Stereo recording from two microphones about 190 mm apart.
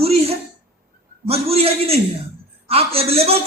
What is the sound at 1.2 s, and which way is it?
Speech, 30° right (ahead or behind).